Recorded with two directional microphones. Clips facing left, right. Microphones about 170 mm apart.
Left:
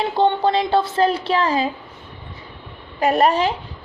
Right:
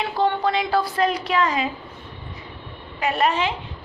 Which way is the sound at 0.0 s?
30° left (ahead or behind).